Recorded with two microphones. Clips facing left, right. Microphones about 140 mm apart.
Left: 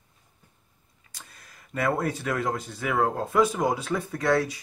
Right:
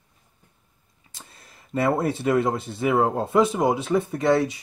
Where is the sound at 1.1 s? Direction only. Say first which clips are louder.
Right 2 dB; 25° right (ahead or behind).